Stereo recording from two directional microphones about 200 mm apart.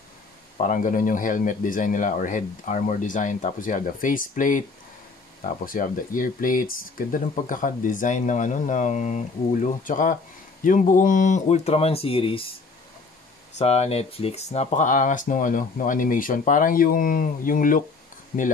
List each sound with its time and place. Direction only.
0.6 s speech: 40° left (ahead or behind)
13.6 s speech: 30° left (ahead or behind)